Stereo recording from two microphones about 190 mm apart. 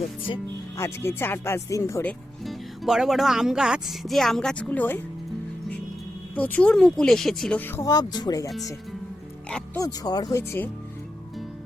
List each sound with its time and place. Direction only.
0.8 s speech: 15° left (ahead or behind)
2.4 s speech: centre (ahead or behind)
6.3 s speech: 10° left (ahead or behind)
9.5 s speech: 5° left (ahead or behind)
9.8 s speech: 20° left (ahead or behind)